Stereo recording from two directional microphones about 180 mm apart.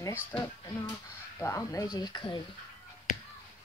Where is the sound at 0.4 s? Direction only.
15° left (ahead or behind).